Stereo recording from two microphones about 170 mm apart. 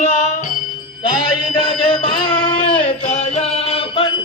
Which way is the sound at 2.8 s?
45° left (ahead or behind).